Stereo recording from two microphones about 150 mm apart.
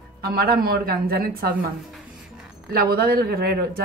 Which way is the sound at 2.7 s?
90° right.